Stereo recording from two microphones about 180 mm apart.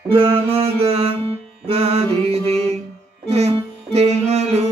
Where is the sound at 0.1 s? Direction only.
30° right (ahead or behind).